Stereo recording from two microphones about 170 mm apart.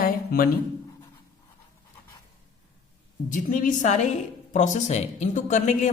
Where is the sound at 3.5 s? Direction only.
50° left (ahead or behind).